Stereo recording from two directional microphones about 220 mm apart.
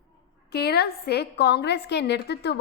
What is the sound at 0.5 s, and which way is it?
A woman's voice, 45° left (ahead or behind).